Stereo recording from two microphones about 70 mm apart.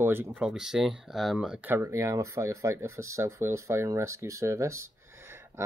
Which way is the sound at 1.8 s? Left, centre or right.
Right.